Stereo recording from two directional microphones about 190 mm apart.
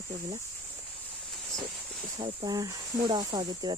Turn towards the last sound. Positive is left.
turn(degrees=-20)  # may be behind; listen again after turning